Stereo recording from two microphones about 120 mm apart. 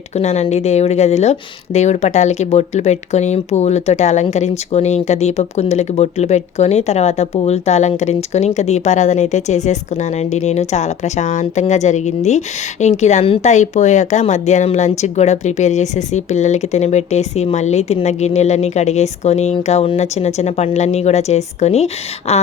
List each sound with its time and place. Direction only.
0.1 s speech: 65° left (ahead or behind)